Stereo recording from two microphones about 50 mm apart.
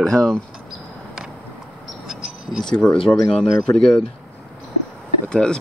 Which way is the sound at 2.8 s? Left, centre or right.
Centre.